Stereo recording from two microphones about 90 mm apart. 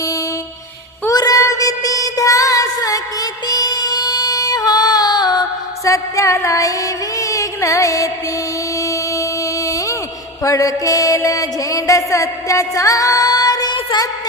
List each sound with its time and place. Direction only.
1.1 s child singing: 40° left (ahead or behind)
5.8 s music: 35° left (ahead or behind)
8.8 s a sound: 40° left (ahead or behind)
10.4 s music: 40° left (ahead or behind)